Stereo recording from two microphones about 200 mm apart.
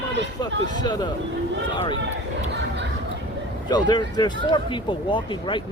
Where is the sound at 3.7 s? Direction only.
20° left (ahead or behind).